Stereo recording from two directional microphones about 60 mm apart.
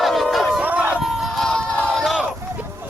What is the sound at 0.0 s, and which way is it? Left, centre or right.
Crowd, centre.